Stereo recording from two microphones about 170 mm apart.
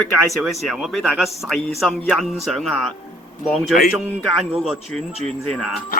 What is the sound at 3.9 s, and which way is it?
A man's voice, centre (ahead or behind).